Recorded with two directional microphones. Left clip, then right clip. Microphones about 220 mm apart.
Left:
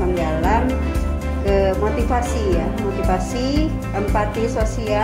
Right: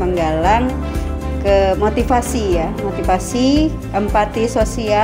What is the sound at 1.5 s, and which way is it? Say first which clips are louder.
A woman's voice: right 5 dB; 45° right (ahead or behind).